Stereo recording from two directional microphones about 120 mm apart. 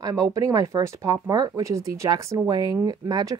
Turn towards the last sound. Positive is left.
turn(degrees=-35)  # may be behind; listen again after turning